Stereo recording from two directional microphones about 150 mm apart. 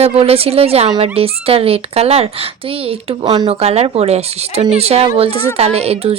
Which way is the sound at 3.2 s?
25° right (ahead or behind).